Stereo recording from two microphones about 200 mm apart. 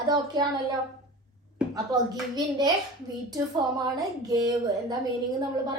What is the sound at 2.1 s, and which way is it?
Speech, 20° right (ahead or behind).